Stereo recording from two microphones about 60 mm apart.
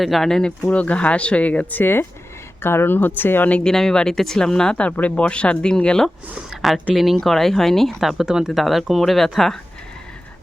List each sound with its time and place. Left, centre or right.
0.0 s speech: centre
0.7 s speech: left
1.8 s speech: left
3.6 s speech: centre
4.9 s speech: left
6.9 s speech: centre
8.0 s speech: centre